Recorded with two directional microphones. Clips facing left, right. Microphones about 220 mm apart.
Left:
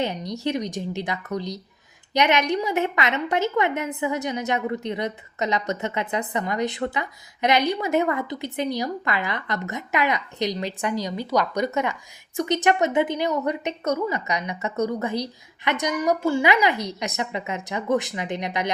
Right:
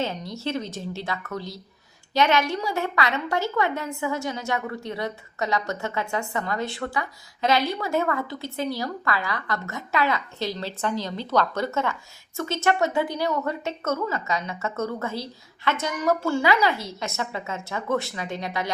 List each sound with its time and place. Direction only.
0.0 s a woman's voice: 15° left (ahead or behind)